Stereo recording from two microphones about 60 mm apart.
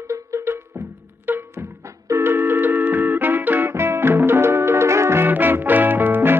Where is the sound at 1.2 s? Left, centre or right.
Right.